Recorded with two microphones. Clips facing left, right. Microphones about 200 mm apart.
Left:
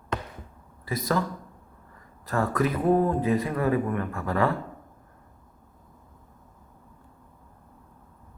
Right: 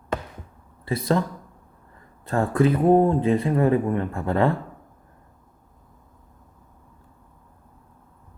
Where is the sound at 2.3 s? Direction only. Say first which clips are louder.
Right 5 dB; 30° right (ahead or behind).